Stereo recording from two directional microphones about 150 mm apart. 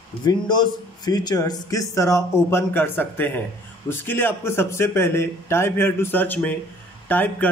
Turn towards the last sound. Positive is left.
turn(degrees=10)  # may be behind; listen again after turning